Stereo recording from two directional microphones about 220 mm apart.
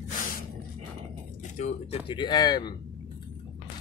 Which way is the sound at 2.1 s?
20° left (ahead or behind).